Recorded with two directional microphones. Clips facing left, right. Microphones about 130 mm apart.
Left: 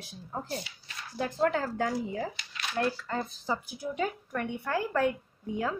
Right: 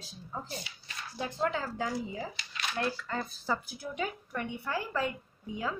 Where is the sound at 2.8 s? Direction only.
45° left (ahead or behind).